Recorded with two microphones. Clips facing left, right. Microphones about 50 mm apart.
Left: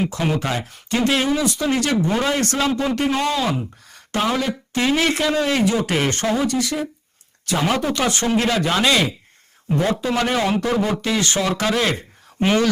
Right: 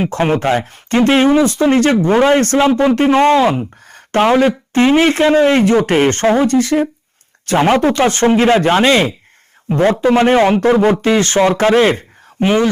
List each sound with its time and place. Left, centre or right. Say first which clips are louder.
0.0 s speech: right 7 dB; right